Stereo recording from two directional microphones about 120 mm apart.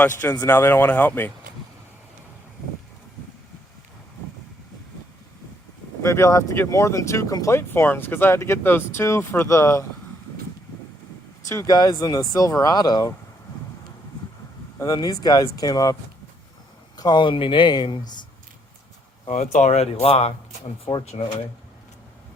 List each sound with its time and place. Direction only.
0.4 s speech: 15° left (ahead or behind)
6.0 s speech: 25° left (ahead or behind)
11.4 s speech: 30° left (ahead or behind)
14.8 s speech: 30° left (ahead or behind)
17.0 s speech: 40° left (ahead or behind)
19.3 s speech: 75° left (ahead or behind)